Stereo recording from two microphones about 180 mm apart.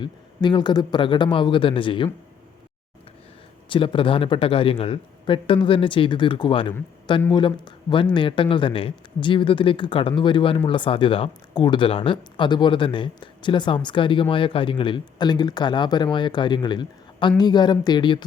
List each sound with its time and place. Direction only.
0.0 s speech: 25° left (ahead or behind)
3.7 s speech: 30° left (ahead or behind)
7.2 s speech: 15° left (ahead or behind)
7.4 s speech: 25° left (ahead or behind)